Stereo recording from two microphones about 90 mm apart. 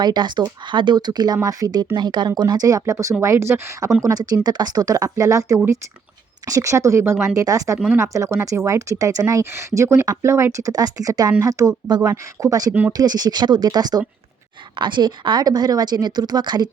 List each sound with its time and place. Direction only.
0.0 s speech: 55° right (ahead or behind)
1.5 s speech: 40° right (ahead or behind)
2.0 s speech: 55° right (ahead or behind); by 3.9 s 35° right (ahead or behind)
4.0 s speech: 45° right (ahead or behind)
10.7 s speech: 45° right (ahead or behind)
14.8 s speech: 60° right (ahead or behind)